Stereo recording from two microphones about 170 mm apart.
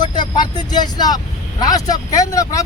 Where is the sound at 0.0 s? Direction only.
25° left (ahead or behind).